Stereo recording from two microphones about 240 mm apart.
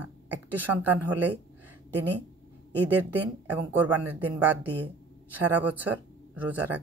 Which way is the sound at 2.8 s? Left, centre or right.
Centre.